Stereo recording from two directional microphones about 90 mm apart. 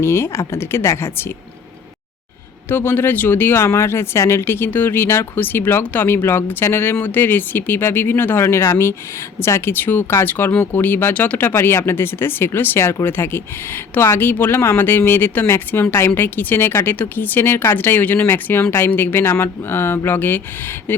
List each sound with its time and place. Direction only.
0.0 s speech: 30° left (ahead or behind)
2.6 s speech: 25° left (ahead or behind)